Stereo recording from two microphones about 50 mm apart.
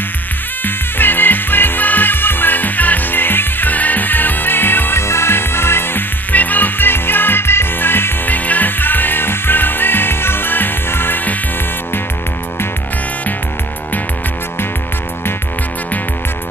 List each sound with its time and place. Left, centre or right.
0.7 s music: left
5.0 s music: left
6.3 s music: left
8.5 s music: left